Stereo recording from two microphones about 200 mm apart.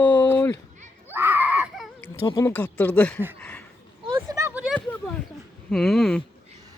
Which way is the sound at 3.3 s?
5° left (ahead or behind).